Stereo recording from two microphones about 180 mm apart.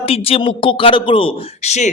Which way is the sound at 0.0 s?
30° left (ahead or behind).